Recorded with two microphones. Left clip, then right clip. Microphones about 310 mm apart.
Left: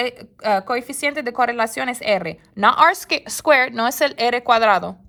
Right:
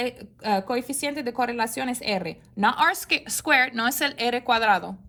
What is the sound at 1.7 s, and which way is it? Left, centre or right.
A woman's voice, left.